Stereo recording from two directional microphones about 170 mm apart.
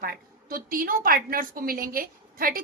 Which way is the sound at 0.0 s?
60° right (ahead or behind).